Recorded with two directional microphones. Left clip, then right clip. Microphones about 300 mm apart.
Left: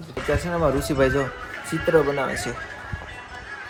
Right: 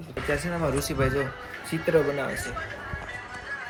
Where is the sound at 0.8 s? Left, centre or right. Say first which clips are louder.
Left 5 dB; centre.